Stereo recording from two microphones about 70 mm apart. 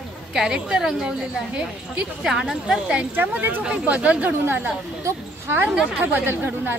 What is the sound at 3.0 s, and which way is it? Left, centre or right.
A woman's voice, right.